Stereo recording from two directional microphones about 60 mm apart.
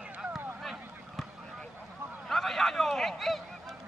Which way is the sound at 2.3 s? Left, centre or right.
Centre.